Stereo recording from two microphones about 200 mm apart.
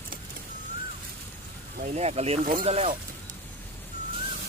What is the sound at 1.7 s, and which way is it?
Speech, 40° right (ahead or behind).